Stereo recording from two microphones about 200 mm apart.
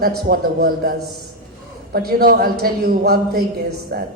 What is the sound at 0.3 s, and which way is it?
A woman's voice, 50° right (ahead or behind).